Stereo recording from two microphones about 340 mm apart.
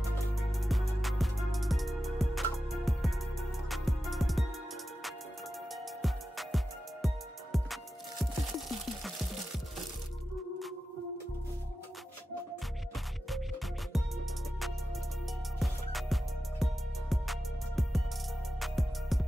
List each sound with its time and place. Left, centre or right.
0.4 s music: centre
6.0 s music: centre
13.9 s music: centre